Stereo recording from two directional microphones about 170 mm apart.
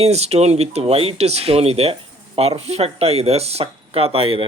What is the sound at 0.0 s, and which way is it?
Speech, 40° right (ahead or behind).